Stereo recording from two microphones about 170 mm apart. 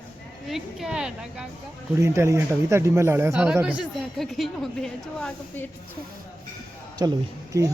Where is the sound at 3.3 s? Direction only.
5° right (ahead or behind).